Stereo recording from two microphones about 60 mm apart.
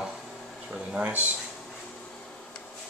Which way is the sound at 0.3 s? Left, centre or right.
Centre.